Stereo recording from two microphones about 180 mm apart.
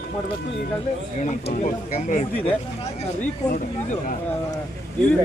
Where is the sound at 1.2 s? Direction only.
40° left (ahead or behind).